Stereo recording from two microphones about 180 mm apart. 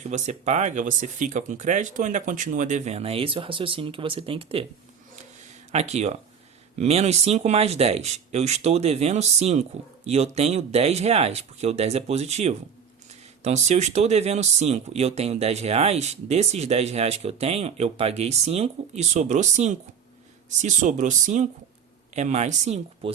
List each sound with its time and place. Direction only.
0.1 s speech: 40° right (ahead or behind)
5.7 s speech: 40° right (ahead or behind)